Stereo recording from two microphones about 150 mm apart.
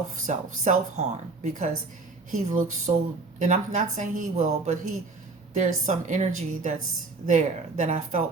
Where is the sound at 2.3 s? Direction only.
55° right (ahead or behind).